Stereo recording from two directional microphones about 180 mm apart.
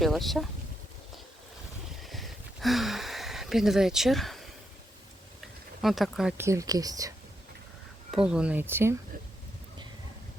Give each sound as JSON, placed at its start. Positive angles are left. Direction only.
{"t": 0.0, "sound": "speech", "side_deg": 0}
{"t": 2.0, "sound": "a sound", "side_deg": 0}
{"t": 5.8, "sound": "speech", "side_deg": 0}
{"t": 6.3, "sound": "speech", "side_deg": -15}
{"t": 8.1, "sound": "speech", "side_deg": -5}